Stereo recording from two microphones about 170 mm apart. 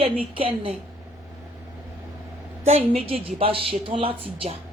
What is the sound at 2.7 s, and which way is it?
Speech, 35° right (ahead or behind).